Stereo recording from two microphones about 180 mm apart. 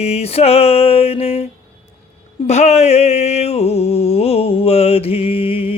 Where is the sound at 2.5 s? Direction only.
40° left (ahead or behind).